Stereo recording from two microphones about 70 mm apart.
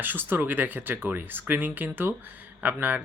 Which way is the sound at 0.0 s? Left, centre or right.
Right.